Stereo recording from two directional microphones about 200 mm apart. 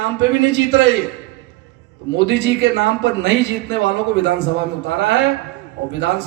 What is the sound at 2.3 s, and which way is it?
Speech, 60° right (ahead or behind).